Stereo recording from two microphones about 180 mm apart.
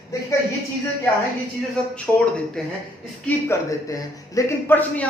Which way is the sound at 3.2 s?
15° left (ahead or behind).